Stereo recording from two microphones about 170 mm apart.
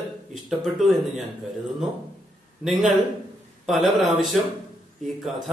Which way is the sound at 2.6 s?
Centre (ahead or behind).